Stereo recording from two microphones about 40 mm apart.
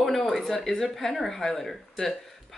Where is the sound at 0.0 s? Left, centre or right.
Centre.